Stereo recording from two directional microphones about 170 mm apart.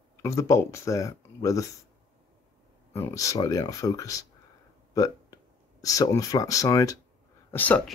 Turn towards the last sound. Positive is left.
turn(degrees=10)  # may be behind; listen again after turning